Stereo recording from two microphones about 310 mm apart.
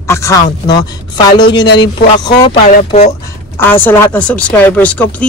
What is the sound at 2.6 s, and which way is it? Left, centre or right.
Speech, left.